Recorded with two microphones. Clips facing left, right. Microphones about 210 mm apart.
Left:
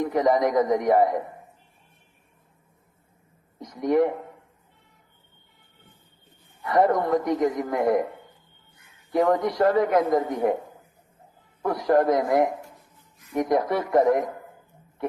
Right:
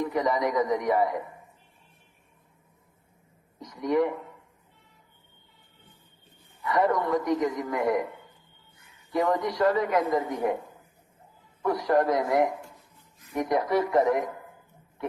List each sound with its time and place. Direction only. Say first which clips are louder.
0.0 s a man's voice: left 5 dB; 50° left (ahead or behind)
3.6 s speech: left 4 dB; 50° left (ahead or behind)
6.6 s a man's voice: left 4 dB; 50° left (ahead or behind)
9.1 s a man's voice: left 4 dB; 50° left (ahead or behind)
11.9 s a man's voice: left 4 dB; 50° left (ahead or behind)